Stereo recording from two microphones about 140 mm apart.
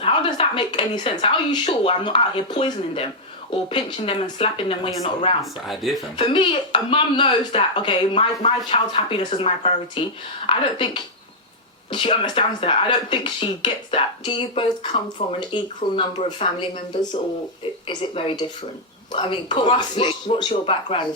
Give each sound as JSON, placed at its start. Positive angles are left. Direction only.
{"t": 0.0, "sound": "speech", "side_deg": 35}
{"t": 5.4, "sound": "speech", "side_deg": 0}
{"t": 6.1, "sound": "speech", "side_deg": 35}
{"t": 17.8, "sound": "speech", "side_deg": 40}